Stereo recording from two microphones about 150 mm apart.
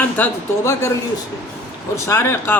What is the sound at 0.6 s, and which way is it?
Speech, 20° left (ahead or behind).